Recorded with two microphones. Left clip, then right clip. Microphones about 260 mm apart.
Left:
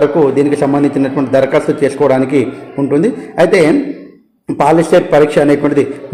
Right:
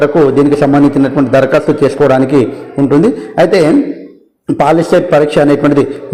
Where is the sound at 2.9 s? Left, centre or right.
Right.